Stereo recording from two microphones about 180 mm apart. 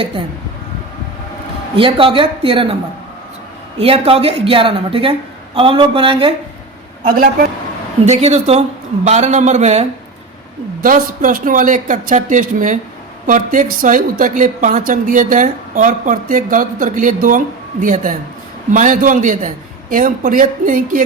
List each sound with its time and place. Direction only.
1.7 s a woman's voice: 30° right (ahead or behind)
3.8 s a woman's voice: 30° right (ahead or behind)
8.0 s a woman's voice: 35° right (ahead or behind)
10.8 s a woman's voice: 50° right (ahead or behind)